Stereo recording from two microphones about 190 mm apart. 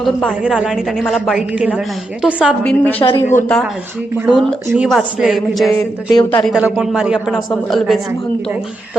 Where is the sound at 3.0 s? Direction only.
30° left (ahead or behind).